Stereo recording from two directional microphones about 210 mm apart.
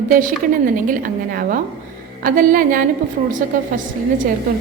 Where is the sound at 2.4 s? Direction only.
40° right (ahead or behind).